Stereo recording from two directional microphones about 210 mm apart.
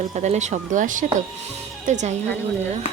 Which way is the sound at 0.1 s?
35° right (ahead or behind).